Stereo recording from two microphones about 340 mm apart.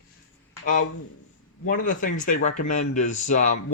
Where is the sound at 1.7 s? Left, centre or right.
Left.